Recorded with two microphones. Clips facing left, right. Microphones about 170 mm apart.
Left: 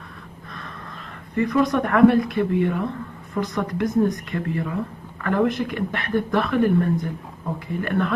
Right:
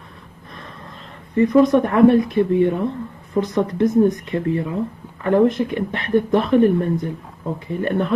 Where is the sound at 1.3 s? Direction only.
25° right (ahead or behind).